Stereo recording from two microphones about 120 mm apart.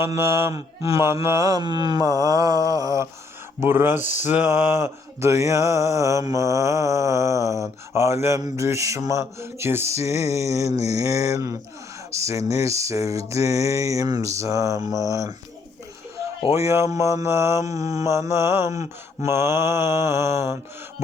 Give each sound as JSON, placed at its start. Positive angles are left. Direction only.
{"t": 0.0, "sound": "mantra", "side_deg": -25}
{"t": 16.5, "sound": "mantra", "side_deg": -25}